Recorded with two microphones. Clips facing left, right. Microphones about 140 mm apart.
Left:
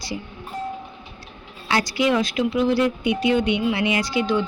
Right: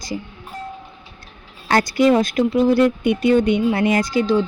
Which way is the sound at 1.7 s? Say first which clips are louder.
Right 5 dB; 50° right (ahead or behind).